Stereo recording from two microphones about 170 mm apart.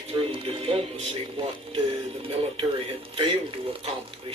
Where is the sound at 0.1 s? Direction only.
30° right (ahead or behind).